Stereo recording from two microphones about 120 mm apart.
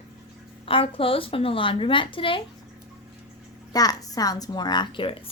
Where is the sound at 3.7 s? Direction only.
30° left (ahead or behind).